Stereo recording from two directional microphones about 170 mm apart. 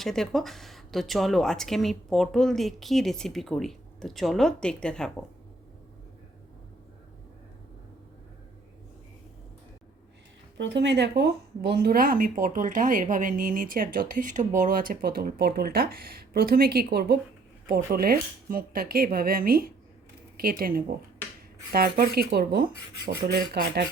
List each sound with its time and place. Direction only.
0.0 s a woman's voice: centre (ahead or behind)
10.6 s speech: 90° right; by 23.8 s 70° right (ahead or behind)